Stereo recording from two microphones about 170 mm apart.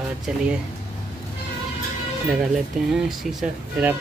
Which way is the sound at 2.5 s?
5° right (ahead or behind).